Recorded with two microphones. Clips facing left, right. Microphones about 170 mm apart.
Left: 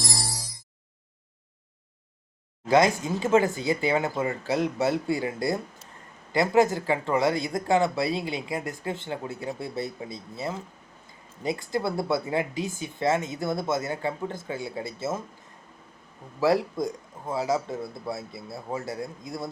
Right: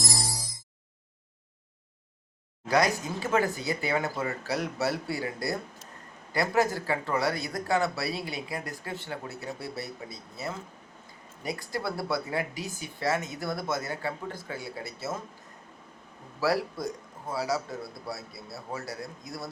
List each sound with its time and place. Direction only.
0.0 s music: centre (ahead or behind)
2.6 s speech: 25° left (ahead or behind)
16.4 s speech: 20° left (ahead or behind)